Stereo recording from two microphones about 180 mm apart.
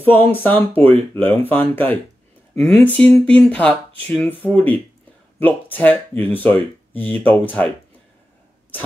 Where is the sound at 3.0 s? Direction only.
5° left (ahead or behind).